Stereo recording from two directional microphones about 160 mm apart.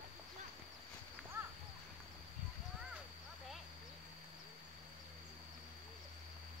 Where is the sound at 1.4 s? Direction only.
15° right (ahead or behind).